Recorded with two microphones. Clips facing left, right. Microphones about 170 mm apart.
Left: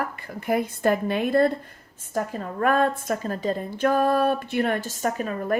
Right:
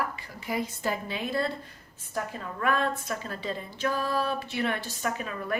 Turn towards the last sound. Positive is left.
turn(degrees=45)  # may be behind; listen again after turning